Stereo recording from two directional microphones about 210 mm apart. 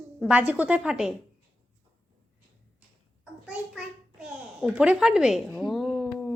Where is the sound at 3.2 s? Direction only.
5° right (ahead or behind).